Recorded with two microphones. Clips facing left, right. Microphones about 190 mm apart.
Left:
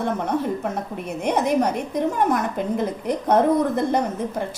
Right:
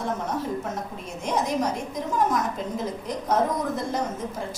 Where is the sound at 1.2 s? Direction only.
60° left (ahead or behind).